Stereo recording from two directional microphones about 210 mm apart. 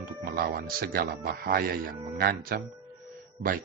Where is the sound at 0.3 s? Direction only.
45° right (ahead or behind).